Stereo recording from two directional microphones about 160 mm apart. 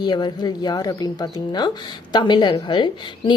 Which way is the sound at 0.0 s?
25° left (ahead or behind).